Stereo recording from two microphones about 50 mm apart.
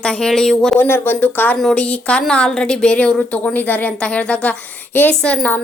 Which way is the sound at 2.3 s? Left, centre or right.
Centre.